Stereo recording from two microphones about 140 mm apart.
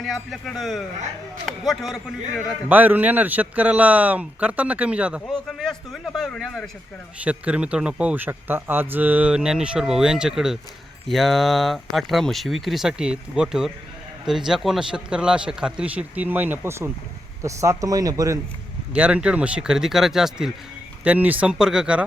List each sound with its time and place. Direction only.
0.0 s speech: centre (ahead or behind)
2.6 s a man's voice: 15° right (ahead or behind); by 6.7 s 5° left (ahead or behind)
7.3 s a man's voice: 10° right (ahead or behind); by 18.3 s 25° right (ahead or behind)
18.9 s a man's voice: 10° right (ahead or behind)